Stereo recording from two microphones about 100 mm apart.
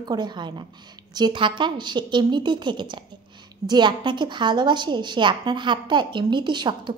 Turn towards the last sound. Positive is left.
turn(degrees=-50)  # may be behind; listen again after turning